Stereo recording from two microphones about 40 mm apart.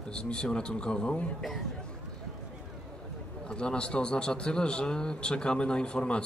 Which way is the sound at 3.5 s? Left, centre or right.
Left.